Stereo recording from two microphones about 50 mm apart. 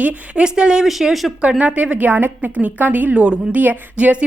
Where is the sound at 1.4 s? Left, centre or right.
Right.